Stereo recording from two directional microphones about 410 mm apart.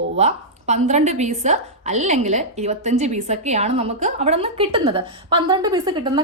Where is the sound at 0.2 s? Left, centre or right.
Centre.